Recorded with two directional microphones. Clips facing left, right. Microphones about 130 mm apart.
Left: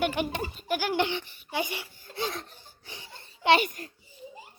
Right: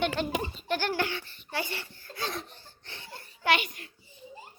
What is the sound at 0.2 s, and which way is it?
Speech, 15° left (ahead or behind).